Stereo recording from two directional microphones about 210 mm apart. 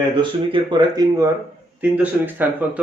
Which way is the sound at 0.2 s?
20° right (ahead or behind).